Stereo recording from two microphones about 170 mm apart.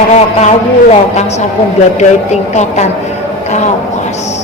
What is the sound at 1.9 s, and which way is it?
Speech, 40° left (ahead or behind).